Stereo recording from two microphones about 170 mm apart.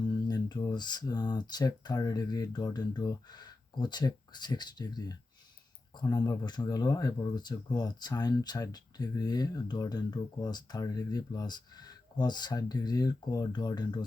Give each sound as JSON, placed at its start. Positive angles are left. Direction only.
{"t": 0.3, "sound": "speech", "side_deg": 25}